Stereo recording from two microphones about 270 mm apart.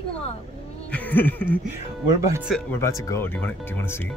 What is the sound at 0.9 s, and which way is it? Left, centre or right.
Speech, centre.